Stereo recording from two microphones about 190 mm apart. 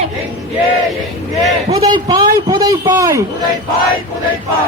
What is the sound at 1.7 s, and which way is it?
A man's voice, 20° right (ahead or behind).